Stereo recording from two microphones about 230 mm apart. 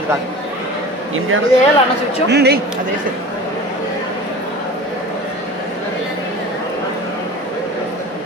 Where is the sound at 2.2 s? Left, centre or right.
Right.